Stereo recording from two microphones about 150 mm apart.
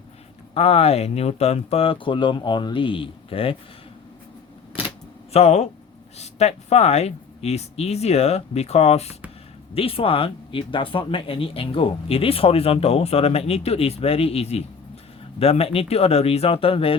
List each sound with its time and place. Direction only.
0.5 s speech: 40° left (ahead or behind)
5.3 s speech: 45° left (ahead or behind)